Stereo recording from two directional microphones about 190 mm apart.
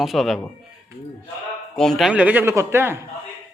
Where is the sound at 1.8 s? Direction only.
Centre (ahead or behind).